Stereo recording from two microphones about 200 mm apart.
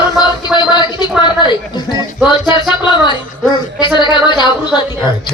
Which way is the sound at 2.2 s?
20° left (ahead or behind).